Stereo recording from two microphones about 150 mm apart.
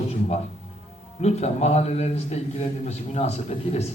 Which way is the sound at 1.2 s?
45° left (ahead or behind).